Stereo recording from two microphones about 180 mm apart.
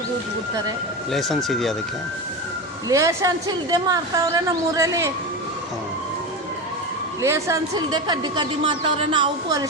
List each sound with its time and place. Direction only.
1.1 s speech: centre (ahead or behind)
2.9 s a woman's voice: 15° right (ahead or behind)
7.2 s a woman's voice: 15° right (ahead or behind)